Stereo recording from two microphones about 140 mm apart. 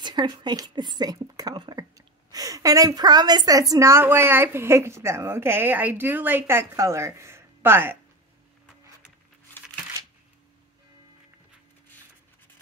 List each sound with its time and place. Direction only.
0.0 s speech: 35° right (ahead or behind); by 8.0 s 15° right (ahead or behind)